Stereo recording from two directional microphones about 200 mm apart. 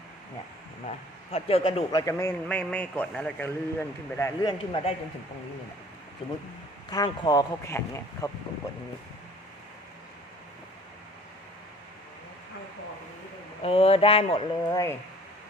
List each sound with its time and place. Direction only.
0.9 s speech: 30° left (ahead or behind)
6.9 s speech: 20° left (ahead or behind)
13.6 s speech: 30° left (ahead or behind)